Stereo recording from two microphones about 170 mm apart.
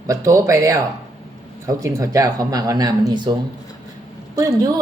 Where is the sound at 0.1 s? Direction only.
20° right (ahead or behind).